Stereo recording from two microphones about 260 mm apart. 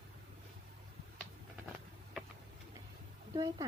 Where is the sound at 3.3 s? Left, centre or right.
Centre.